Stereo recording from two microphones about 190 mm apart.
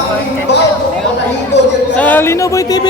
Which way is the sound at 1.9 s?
10° left (ahead or behind).